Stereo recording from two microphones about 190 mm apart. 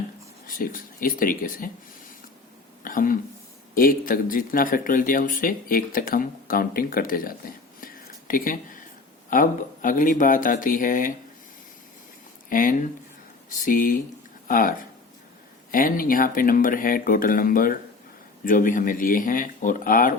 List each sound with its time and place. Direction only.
0.4 s speech: 45° left (ahead or behind)
2.8 s speech: 45° left (ahead or behind)
12.5 s speech: 45° left (ahead or behind)